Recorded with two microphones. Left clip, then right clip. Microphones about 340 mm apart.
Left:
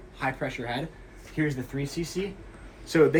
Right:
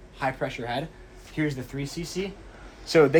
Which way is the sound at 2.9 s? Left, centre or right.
Right.